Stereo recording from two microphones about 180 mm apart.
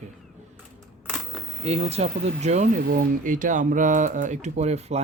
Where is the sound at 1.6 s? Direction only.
35° right (ahead or behind).